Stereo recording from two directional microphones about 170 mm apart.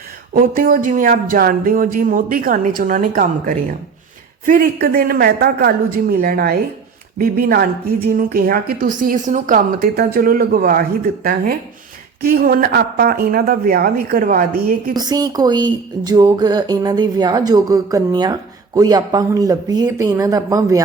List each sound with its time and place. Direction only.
0.3 s a woman's voice: 55° right (ahead or behind)
14.9 s speech: 25° right (ahead or behind)